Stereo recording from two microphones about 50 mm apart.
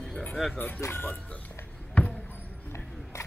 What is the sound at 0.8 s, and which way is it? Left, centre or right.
Speech, left.